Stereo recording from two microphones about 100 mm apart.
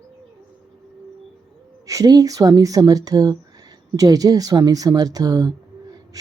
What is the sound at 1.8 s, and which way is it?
Speech, 35° right (ahead or behind).